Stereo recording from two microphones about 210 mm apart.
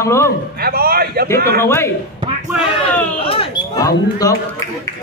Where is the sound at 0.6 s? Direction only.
45° right (ahead or behind).